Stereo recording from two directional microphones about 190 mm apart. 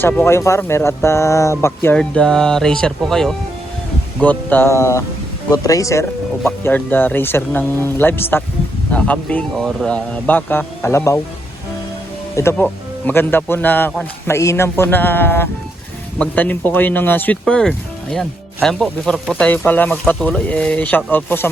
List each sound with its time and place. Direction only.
0.0 s speech: 10° left (ahead or behind)
12.4 s speech: 10° left (ahead or behind)